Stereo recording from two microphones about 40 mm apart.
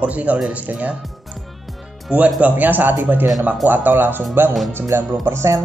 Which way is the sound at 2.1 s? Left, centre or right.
Right.